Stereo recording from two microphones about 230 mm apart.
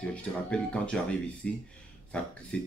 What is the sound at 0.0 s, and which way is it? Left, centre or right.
Speech, centre.